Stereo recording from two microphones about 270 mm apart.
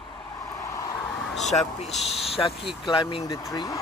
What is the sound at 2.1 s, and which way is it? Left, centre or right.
Speech, left.